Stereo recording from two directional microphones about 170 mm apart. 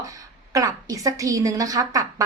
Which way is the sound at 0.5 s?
20° right (ahead or behind).